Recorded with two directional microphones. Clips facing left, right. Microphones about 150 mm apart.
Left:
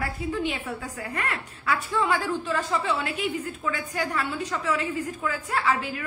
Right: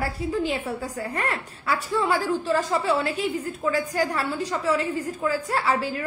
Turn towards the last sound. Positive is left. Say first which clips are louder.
# right 2 dB
turn(degrees=-35)  # may be behind; listen again after turning